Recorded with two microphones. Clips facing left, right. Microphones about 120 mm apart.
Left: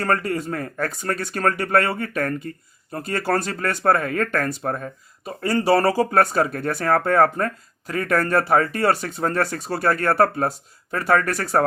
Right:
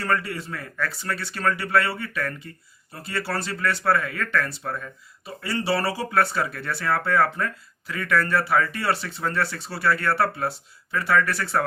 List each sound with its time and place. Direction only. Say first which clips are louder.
0.0 s speech: left 4 dB; 45° left (ahead or behind)